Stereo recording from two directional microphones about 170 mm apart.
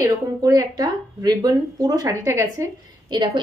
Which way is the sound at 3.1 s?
25° right (ahead or behind).